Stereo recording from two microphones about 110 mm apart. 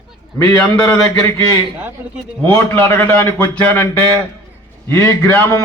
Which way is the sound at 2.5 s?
25° left (ahead or behind).